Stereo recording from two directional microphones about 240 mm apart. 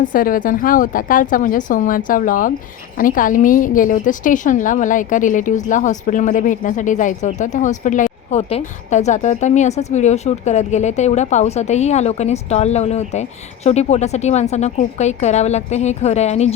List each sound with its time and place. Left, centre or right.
0.0 s a woman's voice: left